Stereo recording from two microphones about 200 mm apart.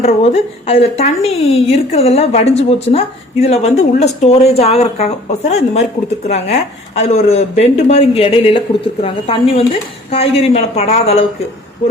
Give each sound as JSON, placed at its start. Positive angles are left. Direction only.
{"t": 0.0, "sound": "speech", "side_deg": 30}